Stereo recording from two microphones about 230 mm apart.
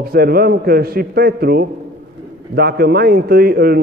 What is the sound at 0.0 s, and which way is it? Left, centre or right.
A man's voice, right.